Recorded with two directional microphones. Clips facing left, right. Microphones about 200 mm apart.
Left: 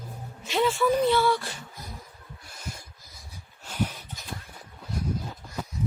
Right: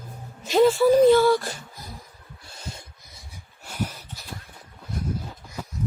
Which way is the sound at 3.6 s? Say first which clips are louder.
Left 1 dB; 10° right (ahead or behind).